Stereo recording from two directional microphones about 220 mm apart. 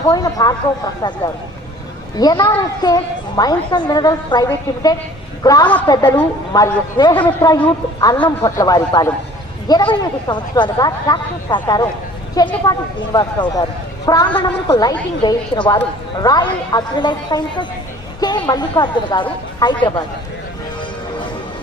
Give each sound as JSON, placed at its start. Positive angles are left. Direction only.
{"t": 0.0, "sound": "a woman's voice", "side_deg": 15}
{"t": 2.1, "sound": "a woman's voice", "side_deg": 20}